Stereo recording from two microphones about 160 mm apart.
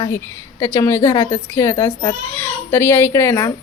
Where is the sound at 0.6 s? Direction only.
15° left (ahead or behind).